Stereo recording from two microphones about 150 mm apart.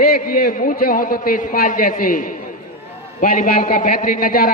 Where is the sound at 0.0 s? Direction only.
80° left.